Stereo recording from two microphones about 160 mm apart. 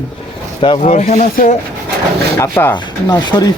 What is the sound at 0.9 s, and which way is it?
Speech, 50° left (ahead or behind).